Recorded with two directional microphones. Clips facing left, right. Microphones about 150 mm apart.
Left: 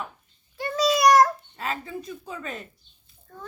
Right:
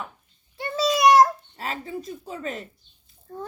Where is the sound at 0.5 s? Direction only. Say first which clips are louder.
Left 1 dB; 25° right (ahead or behind).